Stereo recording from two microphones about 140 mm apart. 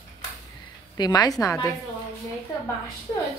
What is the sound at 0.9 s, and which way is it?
Speech, 30° left (ahead or behind).